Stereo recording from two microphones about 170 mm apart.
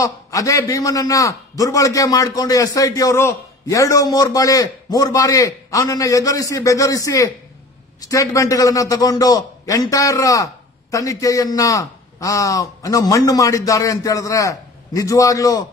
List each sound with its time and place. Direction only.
0.0 s a man's voice: 20° left (ahead or behind)